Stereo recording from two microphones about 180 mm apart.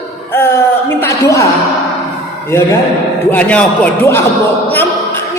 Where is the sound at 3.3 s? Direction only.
5° left (ahead or behind).